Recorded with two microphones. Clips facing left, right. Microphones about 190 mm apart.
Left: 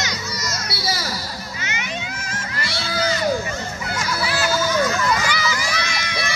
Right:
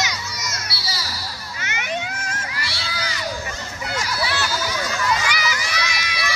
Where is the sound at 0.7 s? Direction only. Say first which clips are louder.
Left 6 dB; 50° left (ahead or behind).